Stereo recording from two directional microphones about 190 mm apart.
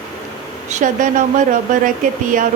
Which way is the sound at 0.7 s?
45° right (ahead or behind).